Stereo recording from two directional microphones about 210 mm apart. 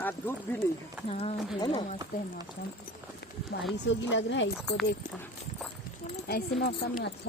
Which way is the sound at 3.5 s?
45° left (ahead or behind).